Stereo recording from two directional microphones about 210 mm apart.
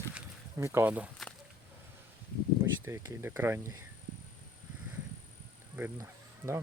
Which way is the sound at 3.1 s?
10° right (ahead or behind).